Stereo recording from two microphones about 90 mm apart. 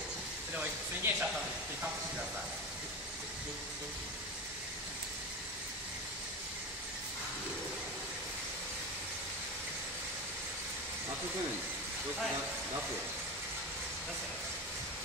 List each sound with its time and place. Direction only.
0.6 s speech: 20° right (ahead or behind)